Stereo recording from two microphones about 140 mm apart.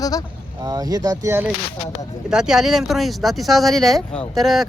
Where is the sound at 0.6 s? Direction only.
25° right (ahead or behind).